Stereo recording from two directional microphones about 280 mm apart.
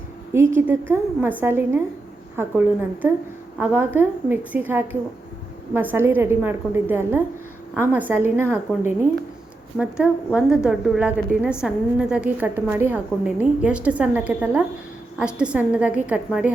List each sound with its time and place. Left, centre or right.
0.3 s a woman's voice: centre
9.7 s a woman's voice: centre